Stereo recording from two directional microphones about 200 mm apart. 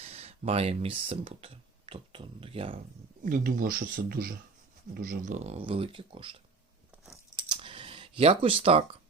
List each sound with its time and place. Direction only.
0.0 s speech: 30° right (ahead or behind)
3.2 s speech: 40° right (ahead or behind); by 6.4 s 25° right (ahead or behind)
7.4 s computer keyboard: 25° right (ahead or behind)